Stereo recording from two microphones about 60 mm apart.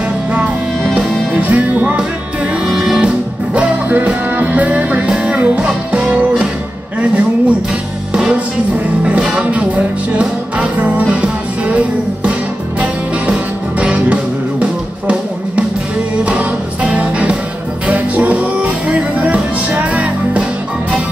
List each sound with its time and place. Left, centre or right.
0.9 s music: right
7.0 s a sound: right
8.1 s music: centre
8.7 s music: right